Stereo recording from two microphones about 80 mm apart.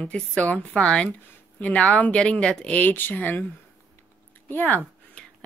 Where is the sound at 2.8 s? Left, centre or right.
Left.